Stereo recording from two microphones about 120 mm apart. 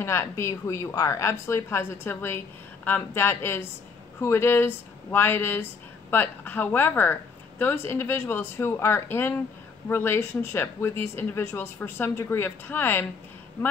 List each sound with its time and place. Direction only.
0.0 s speech: 20° left (ahead or behind)